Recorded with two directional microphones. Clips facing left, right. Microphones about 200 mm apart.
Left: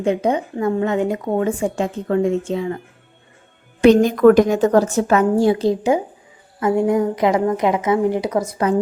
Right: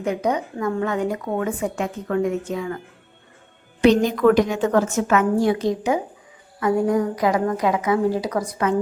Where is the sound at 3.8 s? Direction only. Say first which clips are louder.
Left 4 dB; 50° left (ahead or behind).